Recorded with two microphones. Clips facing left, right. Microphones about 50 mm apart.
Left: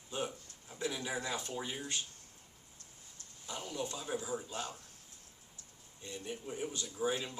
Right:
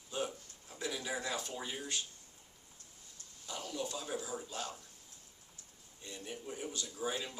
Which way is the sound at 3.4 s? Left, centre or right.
Left.